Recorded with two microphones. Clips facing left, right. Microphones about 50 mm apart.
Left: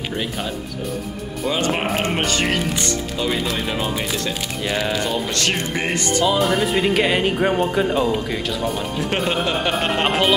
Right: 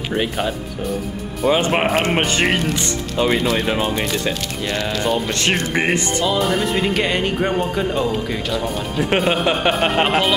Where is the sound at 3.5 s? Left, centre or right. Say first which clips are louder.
Right 4 dB; centre.